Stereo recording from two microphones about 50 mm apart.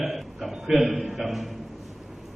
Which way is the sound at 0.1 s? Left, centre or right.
Centre.